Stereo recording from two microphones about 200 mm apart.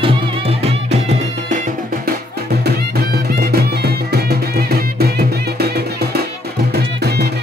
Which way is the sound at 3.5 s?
50° right (ahead or behind).